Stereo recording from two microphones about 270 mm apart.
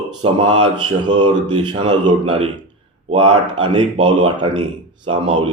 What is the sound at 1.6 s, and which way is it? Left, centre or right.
Speech, centre.